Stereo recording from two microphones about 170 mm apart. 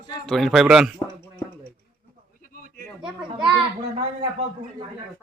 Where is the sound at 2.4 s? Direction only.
55° left (ahead or behind).